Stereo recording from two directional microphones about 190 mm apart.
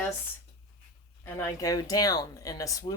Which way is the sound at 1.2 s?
15° left (ahead or behind).